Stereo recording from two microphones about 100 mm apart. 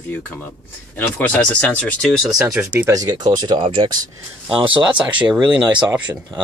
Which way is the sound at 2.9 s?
40° right (ahead or behind).